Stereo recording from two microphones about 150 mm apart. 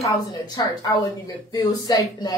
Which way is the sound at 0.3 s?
25° left (ahead or behind).